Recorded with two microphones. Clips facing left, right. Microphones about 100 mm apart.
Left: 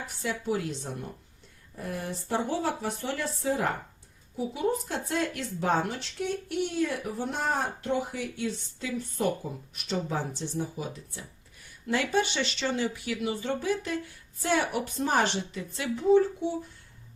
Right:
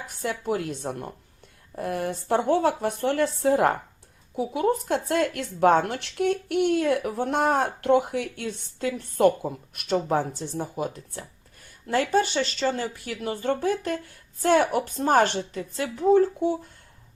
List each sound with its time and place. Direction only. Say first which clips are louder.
0.2 s speech: right 3 dB; 55° right (ahead or behind)